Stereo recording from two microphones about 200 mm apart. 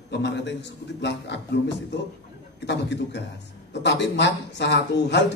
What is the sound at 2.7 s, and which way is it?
Speech, 60° left (ahead or behind).